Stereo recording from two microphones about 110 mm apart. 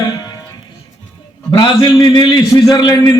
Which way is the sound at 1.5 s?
45° left (ahead or behind).